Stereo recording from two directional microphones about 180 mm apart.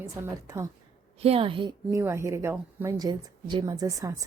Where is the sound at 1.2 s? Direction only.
35° right (ahead or behind).